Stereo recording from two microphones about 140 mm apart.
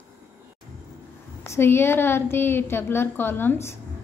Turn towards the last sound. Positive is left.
turn(degrees=15)  # may be behind; listen again after turning